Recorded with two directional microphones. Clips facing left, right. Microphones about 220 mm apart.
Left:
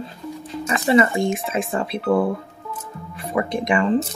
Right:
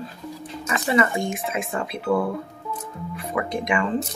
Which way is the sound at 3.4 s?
30° left (ahead or behind).